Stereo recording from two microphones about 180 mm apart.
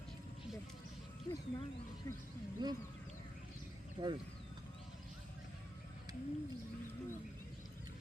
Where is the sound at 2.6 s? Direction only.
25° right (ahead or behind).